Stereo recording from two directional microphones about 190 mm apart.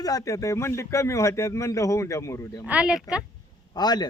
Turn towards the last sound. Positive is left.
turn(degrees=20)  # may be behind; listen again after turning